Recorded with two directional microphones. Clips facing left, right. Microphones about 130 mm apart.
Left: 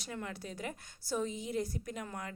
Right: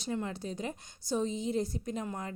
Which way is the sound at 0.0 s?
25° right (ahead or behind).